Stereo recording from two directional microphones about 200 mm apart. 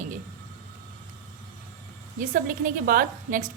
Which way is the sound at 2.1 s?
40° right (ahead or behind).